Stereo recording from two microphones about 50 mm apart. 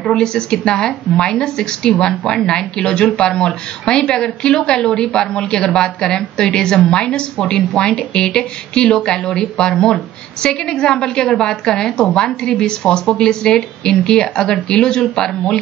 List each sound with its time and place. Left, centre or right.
0.1 s a woman's voice: centre